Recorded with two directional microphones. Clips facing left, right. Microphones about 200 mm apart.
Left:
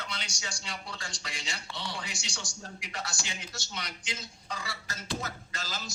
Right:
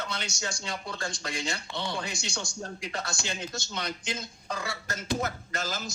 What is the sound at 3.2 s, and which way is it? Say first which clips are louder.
Speech: right 7 dB; 60° right (ahead or behind).